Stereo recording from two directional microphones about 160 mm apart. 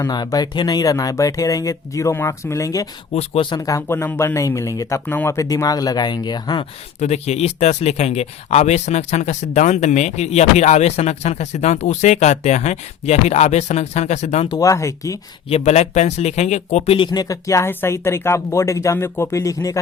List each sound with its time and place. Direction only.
0.0 s speech: 25° left (ahead or behind)
3.2 s speech: 35° left (ahead or behind)
3.7 s speech: 15° left (ahead or behind)
7.0 s speech: 45° left (ahead or behind)
14.5 s speech: 20° left (ahead or behind)
15.4 s speech: 40° left (ahead or behind); by 19.8 s 20° left (ahead or behind)